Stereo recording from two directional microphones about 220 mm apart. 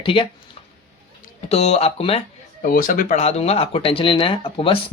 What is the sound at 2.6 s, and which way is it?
Speech, 40° left (ahead or behind).